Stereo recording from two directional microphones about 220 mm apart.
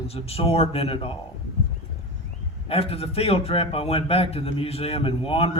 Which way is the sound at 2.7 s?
25° left (ahead or behind).